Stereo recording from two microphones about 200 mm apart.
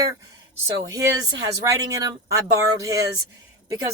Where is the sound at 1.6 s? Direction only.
15° right (ahead or behind).